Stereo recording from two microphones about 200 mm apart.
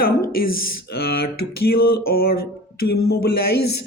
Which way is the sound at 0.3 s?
50° left (ahead or behind).